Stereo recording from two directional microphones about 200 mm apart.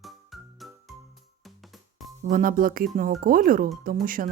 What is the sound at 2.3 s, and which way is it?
Speech, 45° right (ahead or behind).